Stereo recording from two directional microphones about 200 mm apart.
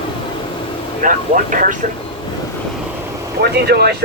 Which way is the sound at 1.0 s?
40° right (ahead or behind).